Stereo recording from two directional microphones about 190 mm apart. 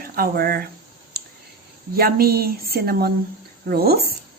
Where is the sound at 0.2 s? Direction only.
50° right (ahead or behind).